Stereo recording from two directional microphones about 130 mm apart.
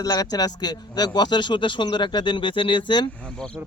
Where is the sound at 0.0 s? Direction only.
30° left (ahead or behind).